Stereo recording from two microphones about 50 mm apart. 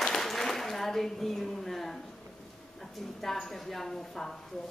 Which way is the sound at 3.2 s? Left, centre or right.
Centre.